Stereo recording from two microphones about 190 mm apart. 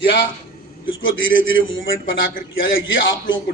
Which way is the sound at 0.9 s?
90° left.